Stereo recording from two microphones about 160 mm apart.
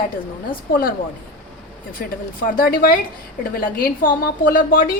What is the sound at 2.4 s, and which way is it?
A woman's voice, 70° left (ahead or behind).